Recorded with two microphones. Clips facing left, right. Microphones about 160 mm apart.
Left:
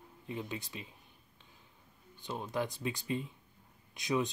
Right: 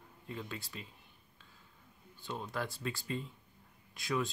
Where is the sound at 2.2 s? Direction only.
20° left (ahead or behind).